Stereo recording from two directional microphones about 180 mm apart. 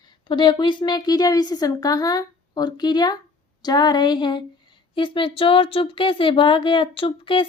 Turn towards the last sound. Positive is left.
turn(degrees=30)  # may be behind; listen again after turning